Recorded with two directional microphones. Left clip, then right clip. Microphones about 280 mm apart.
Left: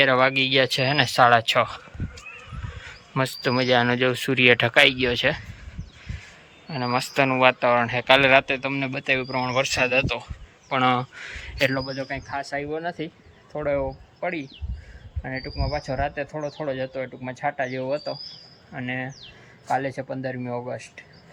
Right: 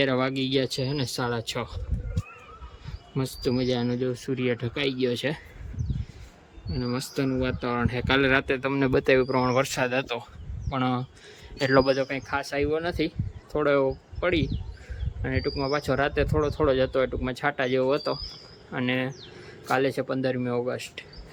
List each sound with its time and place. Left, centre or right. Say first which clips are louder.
0.0 s speech: left 7 dB; centre
3.2 s speech: left 5 dB; centre
3.9 s speech: left 7 dB; centre
4.7 s speech: left 9 dB; centre
6.7 s speech: left 7 dB; centre